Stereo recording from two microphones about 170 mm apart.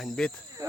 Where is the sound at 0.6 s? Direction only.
20° right (ahead or behind).